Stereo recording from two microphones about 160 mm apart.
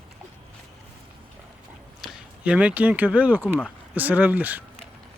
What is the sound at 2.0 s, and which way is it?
Speech, 5° right (ahead or behind).